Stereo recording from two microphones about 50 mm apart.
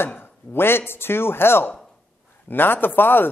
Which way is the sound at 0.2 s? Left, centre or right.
Left.